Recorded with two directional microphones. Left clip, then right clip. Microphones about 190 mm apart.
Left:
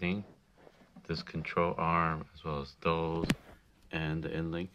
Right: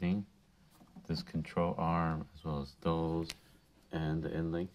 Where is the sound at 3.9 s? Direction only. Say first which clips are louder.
Left 2 dB; 15° left (ahead or behind).